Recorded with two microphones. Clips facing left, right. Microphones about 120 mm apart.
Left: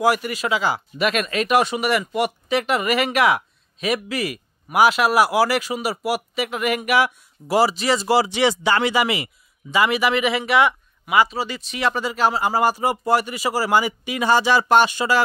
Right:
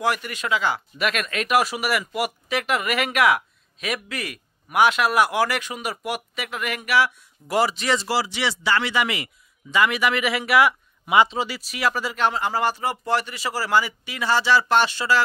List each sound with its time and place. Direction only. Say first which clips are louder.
0.0 s speech: left 5 dB; 10° left (ahead or behind)
7.5 s speech: left 3 dB; 5° left (ahead or behind)
8.1 s speech: left 7 dB; 20° left (ahead or behind); by 10.7 s 5° right (ahead or behind)
11.1 s speech: even; 20° right (ahead or behind)
11.4 s speech: left 2 dB; 5° right (ahead or behind); by 15.2 s 15° left (ahead or behind)